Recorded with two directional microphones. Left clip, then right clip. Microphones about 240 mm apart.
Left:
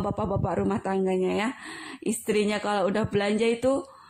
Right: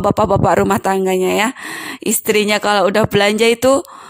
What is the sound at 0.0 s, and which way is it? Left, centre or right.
A woman's voice, right.